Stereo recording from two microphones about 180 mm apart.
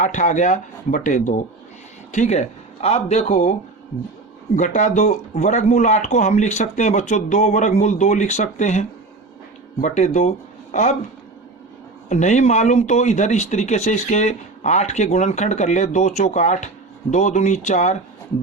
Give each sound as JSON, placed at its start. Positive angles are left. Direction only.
{"t": 0.0, "sound": "speech", "side_deg": 45}
{"t": 4.5, "sound": "speech", "side_deg": 40}
{"t": 12.0, "sound": "speech", "side_deg": 40}